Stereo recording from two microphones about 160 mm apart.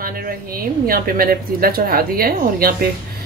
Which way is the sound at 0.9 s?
65° right (ahead or behind).